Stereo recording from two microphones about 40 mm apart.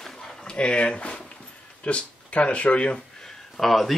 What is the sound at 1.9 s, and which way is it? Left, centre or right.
Speech, left.